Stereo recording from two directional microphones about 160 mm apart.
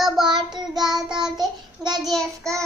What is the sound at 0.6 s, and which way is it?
Child singing, centre (ahead or behind).